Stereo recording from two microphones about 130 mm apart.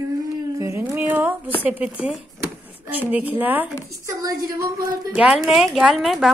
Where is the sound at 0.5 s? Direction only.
20° right (ahead or behind).